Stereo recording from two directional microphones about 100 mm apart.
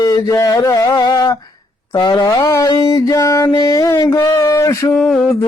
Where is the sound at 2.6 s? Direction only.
35° left (ahead or behind).